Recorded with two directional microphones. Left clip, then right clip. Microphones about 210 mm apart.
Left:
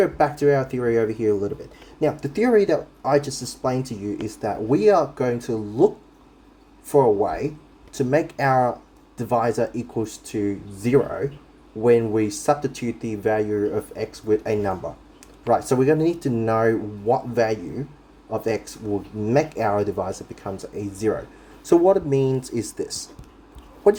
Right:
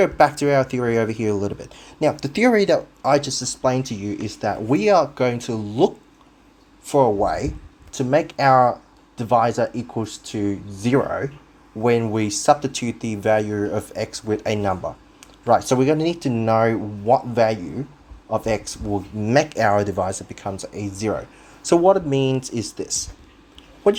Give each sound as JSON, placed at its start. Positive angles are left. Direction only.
{"t": 0.0, "sound": "speech", "side_deg": -25}